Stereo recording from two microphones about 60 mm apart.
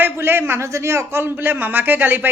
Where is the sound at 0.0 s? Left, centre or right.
Right.